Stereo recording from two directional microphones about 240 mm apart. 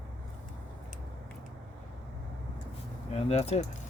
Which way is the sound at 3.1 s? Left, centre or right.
Left.